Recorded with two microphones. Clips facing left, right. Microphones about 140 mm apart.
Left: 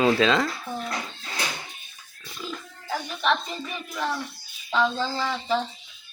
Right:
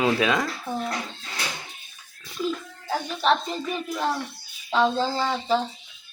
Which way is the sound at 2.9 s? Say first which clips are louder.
Right 3 dB; 35° right (ahead or behind).